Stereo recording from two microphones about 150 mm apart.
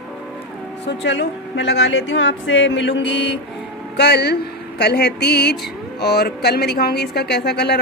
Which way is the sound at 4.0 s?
90° left.